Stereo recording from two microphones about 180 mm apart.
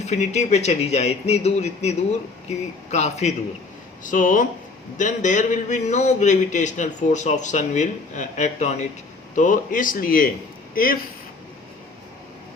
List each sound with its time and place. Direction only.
0.0 s a man's voice: 40° left (ahead or behind)